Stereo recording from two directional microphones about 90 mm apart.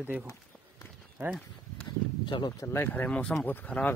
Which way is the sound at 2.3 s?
70° left (ahead or behind).